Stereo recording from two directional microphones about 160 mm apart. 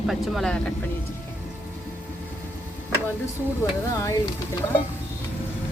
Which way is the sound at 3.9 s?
20° left (ahead or behind).